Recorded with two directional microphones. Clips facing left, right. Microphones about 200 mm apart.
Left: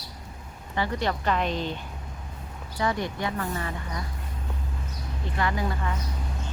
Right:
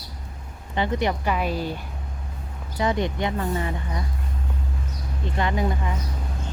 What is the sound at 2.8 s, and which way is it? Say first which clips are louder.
Speech: right 4 dB; 20° right (ahead or behind).